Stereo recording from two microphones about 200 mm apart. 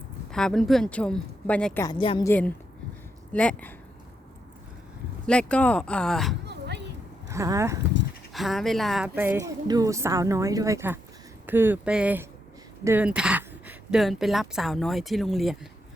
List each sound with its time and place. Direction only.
0.3 s a woman's voice: 5° left (ahead or behind)
1.9 s a woman's voice: 25° left (ahead or behind)
2.2 s speech: 10° left (ahead or behind)
5.2 s a woman's voice: 5° left (ahead or behind)
6.4 s a sound: 60° right (ahead or behind)
7.3 s speech: 15° right (ahead or behind)
8.3 s speech: centre (ahead or behind)